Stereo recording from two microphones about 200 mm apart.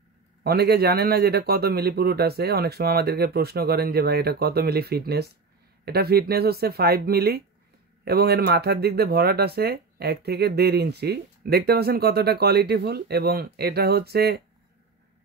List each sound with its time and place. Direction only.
0.4 s speech: 50° right (ahead or behind)